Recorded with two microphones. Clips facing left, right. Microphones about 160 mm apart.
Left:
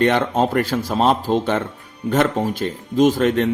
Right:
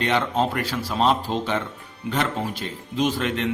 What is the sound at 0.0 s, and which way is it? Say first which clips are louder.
Speech: left 5 dB; 50° left (ahead or behind).